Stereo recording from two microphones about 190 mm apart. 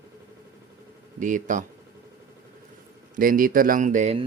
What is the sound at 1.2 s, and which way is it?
Speech, 40° right (ahead or behind).